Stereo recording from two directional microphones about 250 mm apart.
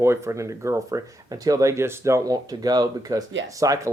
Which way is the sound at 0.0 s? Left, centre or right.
Centre.